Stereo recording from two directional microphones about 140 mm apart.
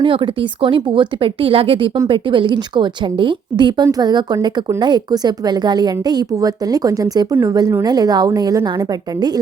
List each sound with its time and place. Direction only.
0.0 s a woman's voice: 40° right (ahead or behind)